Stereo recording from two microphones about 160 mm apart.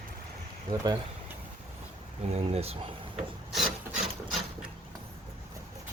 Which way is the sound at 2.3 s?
40° right (ahead or behind).